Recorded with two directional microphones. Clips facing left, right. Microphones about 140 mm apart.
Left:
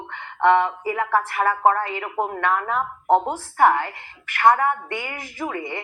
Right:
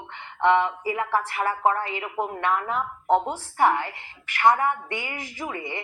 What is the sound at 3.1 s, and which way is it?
Speech, 10° left (ahead or behind).